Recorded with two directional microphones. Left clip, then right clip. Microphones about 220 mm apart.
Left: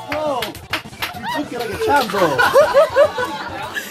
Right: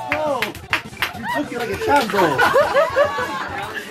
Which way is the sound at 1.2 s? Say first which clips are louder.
Left 2 dB; 10° left (ahead or behind).